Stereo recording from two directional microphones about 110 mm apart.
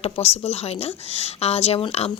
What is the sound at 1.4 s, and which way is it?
Speech, 70° left (ahead or behind).